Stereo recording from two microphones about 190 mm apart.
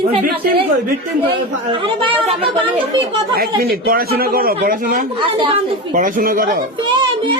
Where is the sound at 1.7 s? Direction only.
25° right (ahead or behind).